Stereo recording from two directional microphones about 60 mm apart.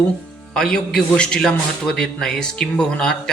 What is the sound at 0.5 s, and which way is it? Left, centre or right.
Music, centre.